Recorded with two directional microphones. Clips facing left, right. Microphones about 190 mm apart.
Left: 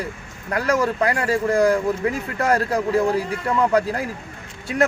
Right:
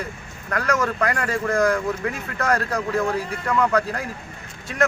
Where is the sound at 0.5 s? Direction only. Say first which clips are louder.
Left 3 dB; 30° left (ahead or behind).